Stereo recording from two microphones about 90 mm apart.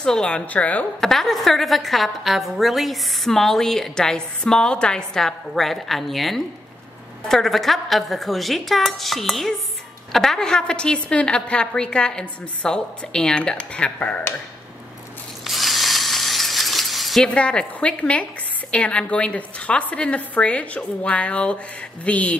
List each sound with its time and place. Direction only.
0.0 s a woman's voice: 10° left (ahead or behind)
1.1 s a woman's voice: centre (ahead or behind)
15.4 s a sound: centre (ahead or behind)
17.3 s a woman's voice: 10° left (ahead or behind)